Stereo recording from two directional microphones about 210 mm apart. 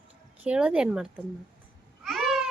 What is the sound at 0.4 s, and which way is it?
Speech, 5° right (ahead or behind).